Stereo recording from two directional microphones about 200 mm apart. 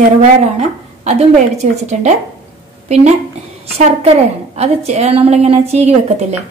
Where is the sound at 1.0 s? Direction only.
35° right (ahead or behind).